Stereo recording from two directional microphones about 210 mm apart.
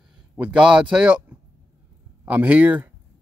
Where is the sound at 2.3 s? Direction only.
5° right (ahead or behind).